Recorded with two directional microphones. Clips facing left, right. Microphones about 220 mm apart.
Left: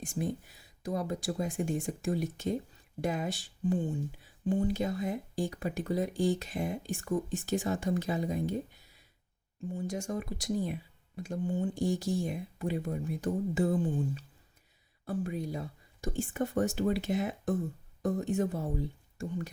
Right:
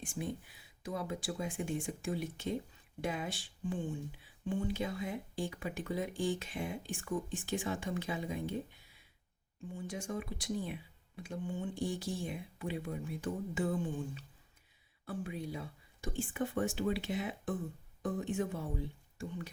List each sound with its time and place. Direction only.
0.0 s speech: 40° left (ahead or behind)